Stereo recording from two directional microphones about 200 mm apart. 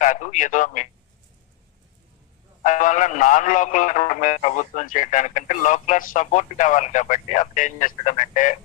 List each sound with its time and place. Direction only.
0.0 s speech: 40° left (ahead or behind)
2.6 s speech: 40° left (ahead or behind)